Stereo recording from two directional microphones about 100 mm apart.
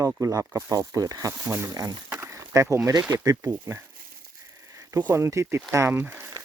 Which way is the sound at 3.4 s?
20° right (ahead or behind).